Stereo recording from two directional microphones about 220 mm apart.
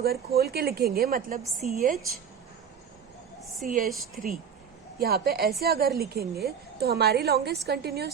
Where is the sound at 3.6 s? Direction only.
40° right (ahead or behind).